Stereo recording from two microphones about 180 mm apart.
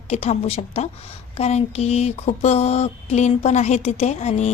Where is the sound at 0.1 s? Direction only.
35° left (ahead or behind).